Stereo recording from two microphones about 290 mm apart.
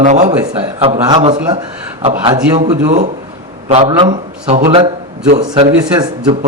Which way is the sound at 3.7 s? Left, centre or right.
Centre.